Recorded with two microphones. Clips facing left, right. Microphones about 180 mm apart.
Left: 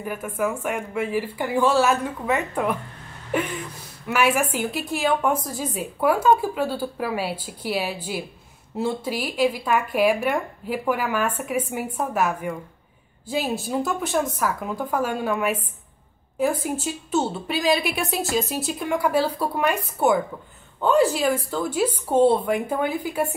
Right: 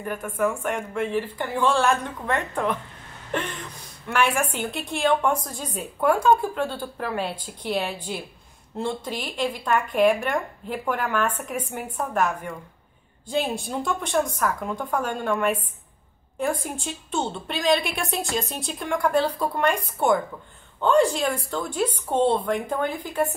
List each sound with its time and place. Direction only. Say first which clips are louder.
0.0 s speech: right 1 dB; 5° left (ahead or behind)
3.3 s a sound: left 4 dB; 10° left (ahead or behind)
4.1 s a woman's voice: left 2 dB; 5° left (ahead or behind)